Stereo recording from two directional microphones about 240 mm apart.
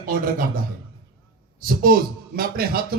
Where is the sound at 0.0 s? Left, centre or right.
Right.